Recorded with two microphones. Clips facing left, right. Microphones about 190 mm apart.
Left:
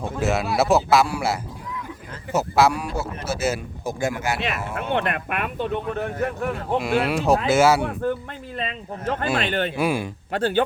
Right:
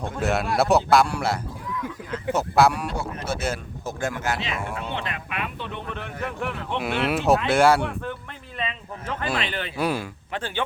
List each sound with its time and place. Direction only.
0.0 s speech: centre (ahead or behind)
4.8 s speech: 55° left (ahead or behind); by 6.7 s 40° left (ahead or behind)
6.8 s speech: centre (ahead or behind)
8.5 s speech: 40° left (ahead or behind)
9.7 s speech: 10° left (ahead or behind)
10.3 s speech: 40° left (ahead or behind)